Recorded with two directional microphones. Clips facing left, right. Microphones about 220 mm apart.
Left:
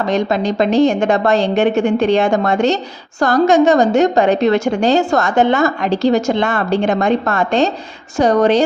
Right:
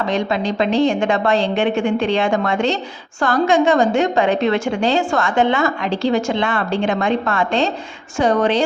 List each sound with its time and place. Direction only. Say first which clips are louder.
0.0 s a woman's voice: left 3 dB; 40° left (ahead or behind)